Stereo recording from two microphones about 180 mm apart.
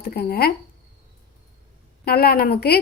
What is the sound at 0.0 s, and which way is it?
Speech, 60° left (ahead or behind).